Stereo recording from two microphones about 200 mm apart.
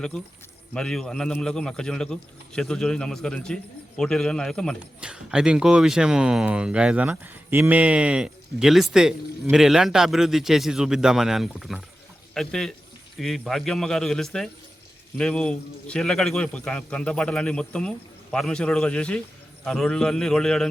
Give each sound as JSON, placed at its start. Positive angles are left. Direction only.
{"t": 0.7, "sound": "speech", "side_deg": 5}